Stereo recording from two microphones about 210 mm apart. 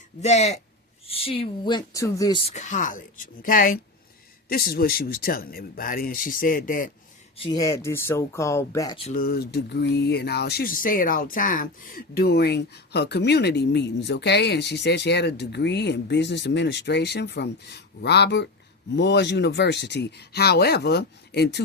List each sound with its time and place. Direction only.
0.2 s speech: 30° left (ahead or behind); by 2.4 s 15° left (ahead or behind)
2.5 s speech: 35° left (ahead or behind)
7.3 s speech: 25° left (ahead or behind)
9.1 s speech: 45° left (ahead or behind)